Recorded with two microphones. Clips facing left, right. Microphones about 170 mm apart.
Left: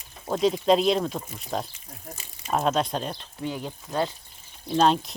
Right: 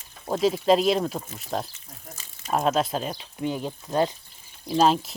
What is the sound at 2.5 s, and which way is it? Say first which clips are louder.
Speech: right 1 dB; 5° right (ahead or behind).